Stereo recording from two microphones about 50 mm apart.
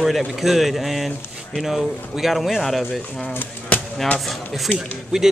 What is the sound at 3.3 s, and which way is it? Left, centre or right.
Speech, left.